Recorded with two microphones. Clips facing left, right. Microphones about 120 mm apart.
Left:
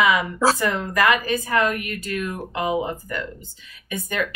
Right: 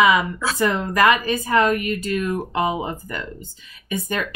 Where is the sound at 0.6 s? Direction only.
25° right (ahead or behind).